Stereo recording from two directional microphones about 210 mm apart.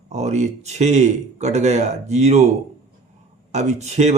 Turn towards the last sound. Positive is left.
turn(degrees=-30)  # may be behind; listen again after turning